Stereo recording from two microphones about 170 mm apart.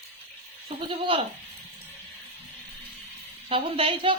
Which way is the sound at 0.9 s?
30° right (ahead or behind).